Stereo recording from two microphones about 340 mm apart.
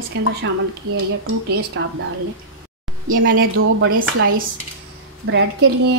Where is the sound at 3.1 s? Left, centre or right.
Right.